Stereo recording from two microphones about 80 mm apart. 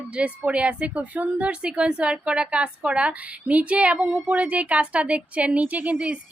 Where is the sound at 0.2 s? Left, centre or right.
Centre.